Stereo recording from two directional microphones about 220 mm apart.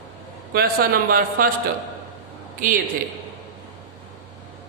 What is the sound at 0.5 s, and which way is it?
Speech, 45° right (ahead or behind).